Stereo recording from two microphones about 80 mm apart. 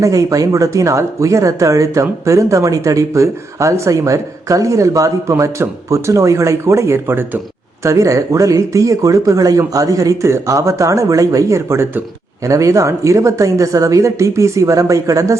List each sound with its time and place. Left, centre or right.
0.0 s speech: right
7.9 s speech: right
12.5 s speech: right